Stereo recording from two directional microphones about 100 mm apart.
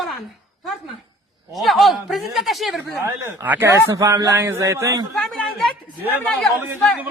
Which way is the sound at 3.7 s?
30° right (ahead or behind).